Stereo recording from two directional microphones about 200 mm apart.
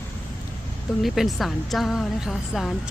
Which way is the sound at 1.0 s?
Centre (ahead or behind).